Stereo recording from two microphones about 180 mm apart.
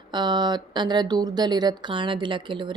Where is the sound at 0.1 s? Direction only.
25° right (ahead or behind).